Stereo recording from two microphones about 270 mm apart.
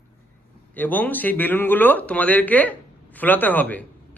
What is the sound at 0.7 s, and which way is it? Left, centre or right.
Speech, centre.